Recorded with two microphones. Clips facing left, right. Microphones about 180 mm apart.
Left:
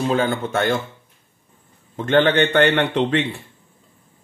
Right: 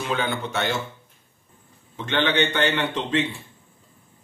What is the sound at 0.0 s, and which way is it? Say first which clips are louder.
Speech: left 6 dB; 40° left (ahead or behind).